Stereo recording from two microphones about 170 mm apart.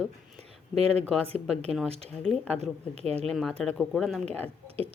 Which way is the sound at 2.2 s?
5° left (ahead or behind).